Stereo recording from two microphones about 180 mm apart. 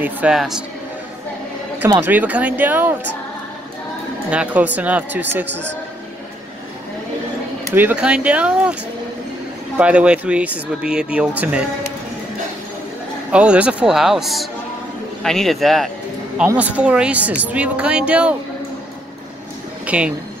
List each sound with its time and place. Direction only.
0.0 s a man's voice: 5° right (ahead or behind)
2.0 s a woman's voice: 10° right (ahead or behind)
4.3 s a woman's voice: 5° right (ahead or behind)
5.5 s speech: 75° right (ahead or behind)
7.7 s a woman's voice: 10° right (ahead or behind)
9.8 s a woman's voice: 5° right (ahead or behind)
13.3 s a man's voice: 5° right (ahead or behind)
19.9 s speech: 5° right (ahead or behind)